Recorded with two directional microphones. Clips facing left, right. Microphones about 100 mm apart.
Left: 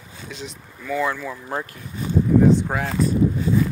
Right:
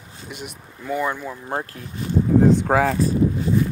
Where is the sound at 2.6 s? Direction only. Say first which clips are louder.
Right 8 dB; 90° right.